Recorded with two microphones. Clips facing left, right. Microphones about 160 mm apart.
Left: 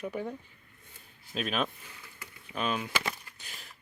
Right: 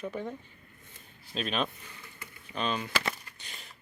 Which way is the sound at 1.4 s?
5° left (ahead or behind).